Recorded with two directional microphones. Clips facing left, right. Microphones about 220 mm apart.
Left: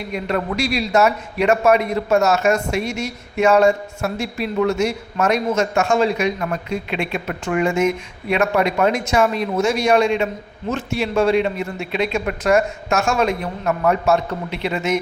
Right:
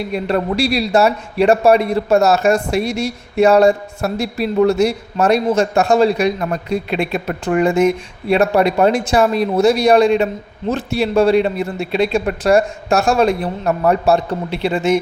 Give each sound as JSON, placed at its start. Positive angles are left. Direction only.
{"t": 0.1, "sound": "a man's voice", "side_deg": -35}